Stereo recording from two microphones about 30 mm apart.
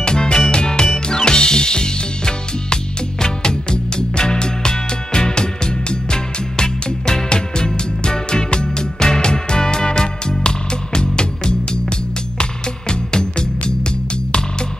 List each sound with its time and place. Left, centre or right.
0.0 s music: left